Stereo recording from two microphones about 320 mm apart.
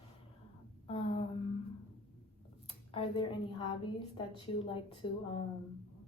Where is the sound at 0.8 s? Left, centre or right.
Centre.